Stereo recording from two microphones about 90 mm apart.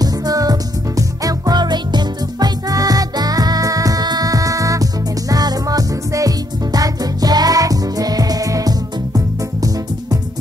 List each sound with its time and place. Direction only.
0.0 s music: 45° right (ahead or behind)